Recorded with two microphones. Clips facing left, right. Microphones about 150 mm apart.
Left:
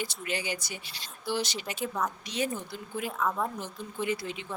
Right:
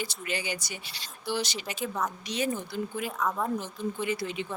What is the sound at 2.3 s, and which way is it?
Speech, 70° right (ahead or behind).